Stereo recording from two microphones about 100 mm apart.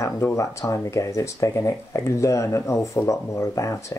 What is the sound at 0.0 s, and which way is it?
Speech, 30° left (ahead or behind).